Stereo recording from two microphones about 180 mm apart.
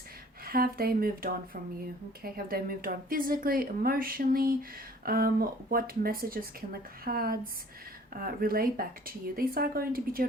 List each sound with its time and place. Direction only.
0.4 s a woman's voice: 55° right (ahead or behind)